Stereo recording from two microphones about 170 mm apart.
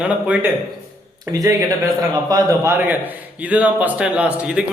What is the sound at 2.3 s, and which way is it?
A man's voice, 20° right (ahead or behind).